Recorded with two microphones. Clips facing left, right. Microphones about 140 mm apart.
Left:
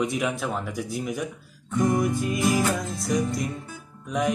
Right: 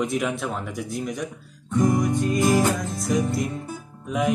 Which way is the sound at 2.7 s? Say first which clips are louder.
Right 2 dB; centre (ahead or behind).